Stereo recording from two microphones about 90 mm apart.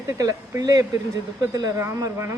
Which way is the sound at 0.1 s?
35° right (ahead or behind).